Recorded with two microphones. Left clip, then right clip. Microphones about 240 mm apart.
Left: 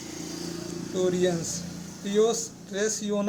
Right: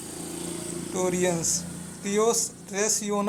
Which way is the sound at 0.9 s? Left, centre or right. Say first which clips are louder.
Even; centre.